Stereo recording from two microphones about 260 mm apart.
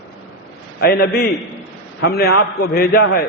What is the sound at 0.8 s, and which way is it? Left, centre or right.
A man's voice, left.